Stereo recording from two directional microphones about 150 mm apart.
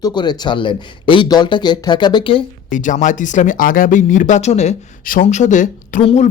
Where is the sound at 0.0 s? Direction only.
30° left (ahead or behind).